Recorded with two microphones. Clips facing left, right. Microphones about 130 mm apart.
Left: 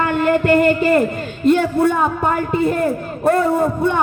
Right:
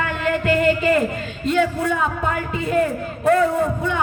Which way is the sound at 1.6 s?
40° left (ahead or behind).